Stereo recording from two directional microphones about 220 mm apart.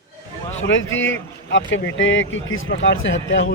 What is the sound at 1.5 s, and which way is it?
Speech, 55° left (ahead or behind).